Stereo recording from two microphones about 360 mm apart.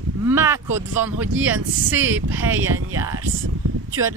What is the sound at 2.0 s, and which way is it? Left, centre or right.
Speech, right.